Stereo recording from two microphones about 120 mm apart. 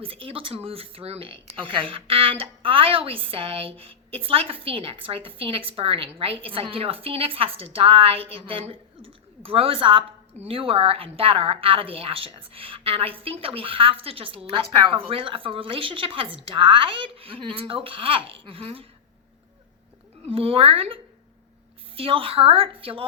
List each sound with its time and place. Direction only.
0.0 s a woman's voice: 50° right (ahead or behind)
20.2 s a woman's voice: 50° right (ahead or behind)